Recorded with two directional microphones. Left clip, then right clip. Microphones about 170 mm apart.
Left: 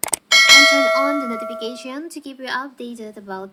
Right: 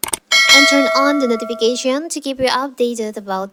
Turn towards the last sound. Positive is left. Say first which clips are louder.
# right 10 dB
turn(degrees=-55)  # may be behind; listen again after turning